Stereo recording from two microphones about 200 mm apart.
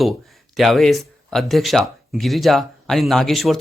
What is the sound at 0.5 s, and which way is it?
Speech, centre (ahead or behind).